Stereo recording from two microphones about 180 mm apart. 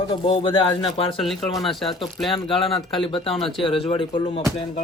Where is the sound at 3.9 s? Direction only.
25° left (ahead or behind).